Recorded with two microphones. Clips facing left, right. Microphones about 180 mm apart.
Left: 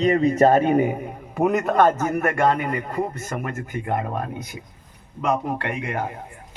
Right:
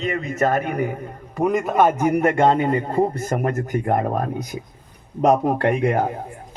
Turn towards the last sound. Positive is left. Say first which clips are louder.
# right 8 dB
turn(degrees=-35)  # may be behind; listen again after turning